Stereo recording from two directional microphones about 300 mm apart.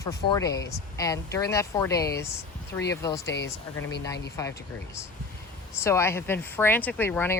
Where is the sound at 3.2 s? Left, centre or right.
Left.